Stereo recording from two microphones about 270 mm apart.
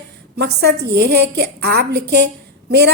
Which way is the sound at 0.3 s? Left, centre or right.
Right.